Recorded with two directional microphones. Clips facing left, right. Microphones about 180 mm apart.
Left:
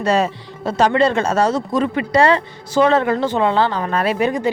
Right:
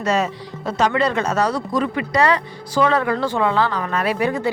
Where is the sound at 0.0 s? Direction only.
30° left (ahead or behind).